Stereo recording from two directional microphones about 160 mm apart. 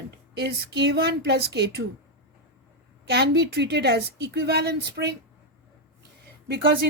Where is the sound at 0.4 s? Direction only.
90° right.